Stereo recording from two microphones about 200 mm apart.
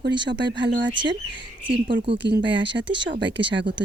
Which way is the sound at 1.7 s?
25° right (ahead or behind).